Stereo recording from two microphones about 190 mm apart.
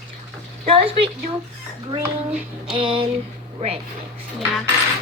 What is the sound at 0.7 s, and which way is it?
Speech, 30° right (ahead or behind).